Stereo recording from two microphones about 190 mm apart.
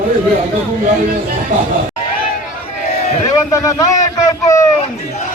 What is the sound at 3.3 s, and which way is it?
A man's voice, 15° left (ahead or behind).